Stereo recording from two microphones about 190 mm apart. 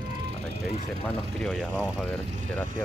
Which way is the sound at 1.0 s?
5° left (ahead or behind).